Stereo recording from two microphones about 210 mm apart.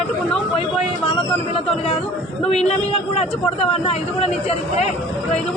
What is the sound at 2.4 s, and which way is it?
A man's voice, 30° left (ahead or behind).